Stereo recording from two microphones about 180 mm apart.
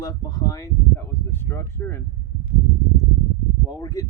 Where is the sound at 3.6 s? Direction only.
20° left (ahead or behind).